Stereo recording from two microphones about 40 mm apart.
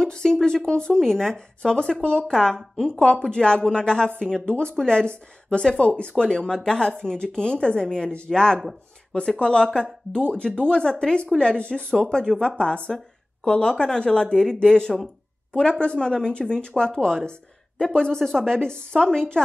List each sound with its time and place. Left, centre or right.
0.0 s a sound: centre
0.7 s speech: left
0.9 s speech: centre
1.3 s speech: left
2.2 s speech: centre; by 6.2 s left
6.2 s speech: centre
16.9 s speech: centre
17.3 s a woman's voice: left
18.2 s speech: centre
18.6 s speech: left